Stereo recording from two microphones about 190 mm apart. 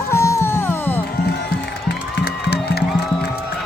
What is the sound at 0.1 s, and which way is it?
Music, 15° left (ahead or behind).